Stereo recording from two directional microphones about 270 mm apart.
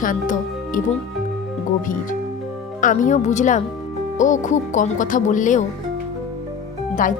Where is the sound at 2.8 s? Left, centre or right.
Left.